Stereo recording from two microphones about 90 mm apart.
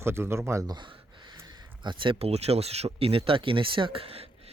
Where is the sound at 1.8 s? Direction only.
70° right (ahead or behind).